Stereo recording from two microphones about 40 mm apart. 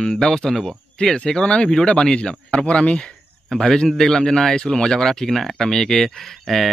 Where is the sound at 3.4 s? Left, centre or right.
Centre.